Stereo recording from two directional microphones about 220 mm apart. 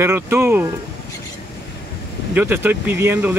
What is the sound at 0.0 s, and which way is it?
Speech, 10° right (ahead or behind).